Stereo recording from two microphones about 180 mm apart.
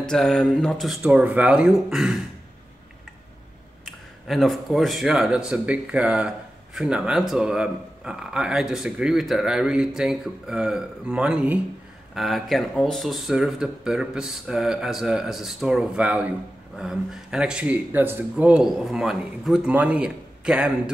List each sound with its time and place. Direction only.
0.0 s speech: 5° left (ahead or behind)
3.8 s speech: centre (ahead or behind)